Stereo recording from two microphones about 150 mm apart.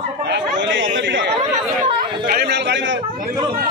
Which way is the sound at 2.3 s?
90° right.